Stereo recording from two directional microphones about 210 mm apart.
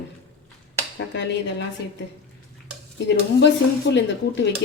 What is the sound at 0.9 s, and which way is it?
Speech, 55° left (ahead or behind).